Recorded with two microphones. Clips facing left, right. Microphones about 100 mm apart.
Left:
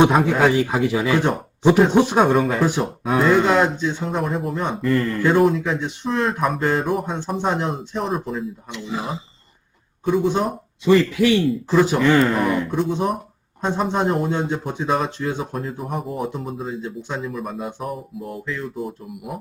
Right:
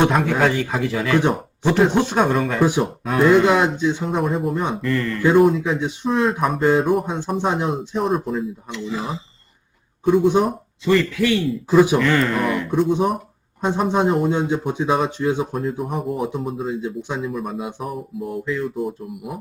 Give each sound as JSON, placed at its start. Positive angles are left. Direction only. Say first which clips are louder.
{"t": 0.0, "sound": "a man's voice", "louder": "left 2 dB", "side_deg": 5}
{"t": 2.2, "sound": "speech", "louder": "left 1 dB", "side_deg": 0}
{"t": 2.6, "sound": "speech", "louder": "right 2 dB", "side_deg": -15}
{"t": 3.0, "sound": "speech", "louder": "left 1 dB", "side_deg": 0}
{"t": 3.2, "sound": "speech", "louder": "right 2 dB", "side_deg": -15}
{"t": 4.1, "sound": "speech", "louder": "right 2 dB", "side_deg": 0}
{"t": 8.7, "sound": "a man's voice", "louder": "right 1 dB", "side_deg": 15}
{"t": 10.0, "sound": "speech", "louder": "right 4 dB", "side_deg": -5}
{"t": 10.8, "sound": "a man's voice", "louder": "left 2 dB", "side_deg": 15}
{"t": 11.4, "sound": "speech", "louder": "right 2 dB", "side_deg": -5}
{"t": 11.9, "sound": "a man's voice", "louder": "left 2 dB", "side_deg": 15}
{"t": 12.2, "sound": "speech", "louder": "left 2 dB", "side_deg": 0}
{"t": 13.6, "sound": "speech", "louder": "right 2 dB", "side_deg": -10}